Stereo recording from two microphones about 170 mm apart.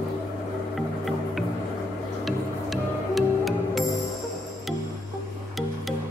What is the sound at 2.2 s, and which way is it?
Music, centre (ahead or behind).